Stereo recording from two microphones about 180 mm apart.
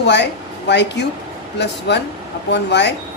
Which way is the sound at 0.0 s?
70° left (ahead or behind).